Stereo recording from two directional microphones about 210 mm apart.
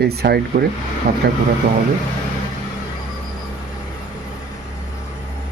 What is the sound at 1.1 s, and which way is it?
Speech, 40° right (ahead or behind).